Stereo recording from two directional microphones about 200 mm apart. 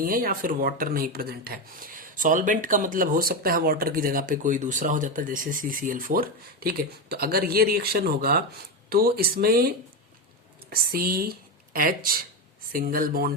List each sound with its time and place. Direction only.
0.0 s speech: 45° right (ahead or behind)